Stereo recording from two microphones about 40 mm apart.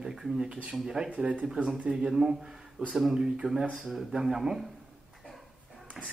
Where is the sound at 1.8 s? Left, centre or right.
Centre.